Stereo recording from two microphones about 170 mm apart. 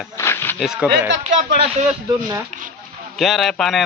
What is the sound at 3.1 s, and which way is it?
Speech, centre (ahead or behind).